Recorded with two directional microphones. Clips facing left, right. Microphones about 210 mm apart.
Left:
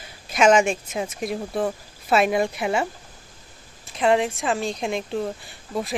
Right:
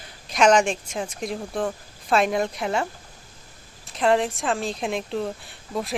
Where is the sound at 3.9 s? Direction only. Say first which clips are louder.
Left 1 dB; centre (ahead or behind).